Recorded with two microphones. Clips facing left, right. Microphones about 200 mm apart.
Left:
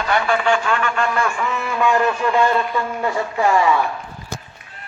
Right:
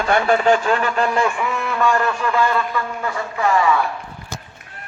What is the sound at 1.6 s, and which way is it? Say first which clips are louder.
Speech: left 2 dB; 15° left (ahead or behind).